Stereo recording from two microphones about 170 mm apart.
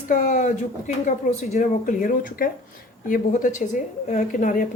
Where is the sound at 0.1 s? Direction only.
50° left (ahead or behind).